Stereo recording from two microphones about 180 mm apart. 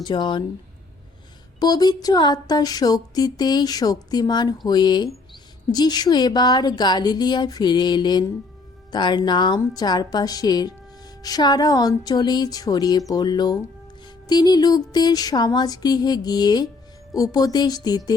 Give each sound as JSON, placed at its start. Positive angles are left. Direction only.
{"t": 0.0, "sound": "speech", "side_deg": 25}
{"t": 1.5, "sound": "speech", "side_deg": 20}